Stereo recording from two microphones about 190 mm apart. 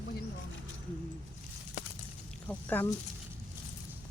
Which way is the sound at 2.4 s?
10° left (ahead or behind).